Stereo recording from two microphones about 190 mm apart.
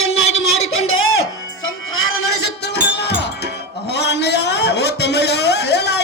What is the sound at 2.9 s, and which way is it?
Music, 60° left (ahead or behind).